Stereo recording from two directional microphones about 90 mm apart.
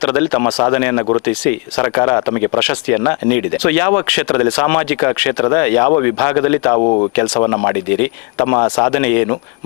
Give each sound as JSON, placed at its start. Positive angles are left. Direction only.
{"t": 0.0, "sound": "speech", "side_deg": 15}
{"t": 6.7, "sound": "speech", "side_deg": 40}
{"t": 7.2, "sound": "speech", "side_deg": 20}